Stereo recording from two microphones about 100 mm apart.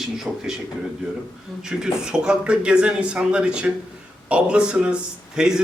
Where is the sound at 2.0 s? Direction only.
10° right (ahead or behind).